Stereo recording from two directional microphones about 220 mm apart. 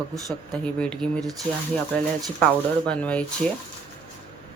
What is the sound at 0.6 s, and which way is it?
Speech, 5° left (ahead or behind).